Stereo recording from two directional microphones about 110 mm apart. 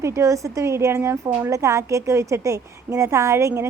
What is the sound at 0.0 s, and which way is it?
A woman's voice, 30° right (ahead or behind).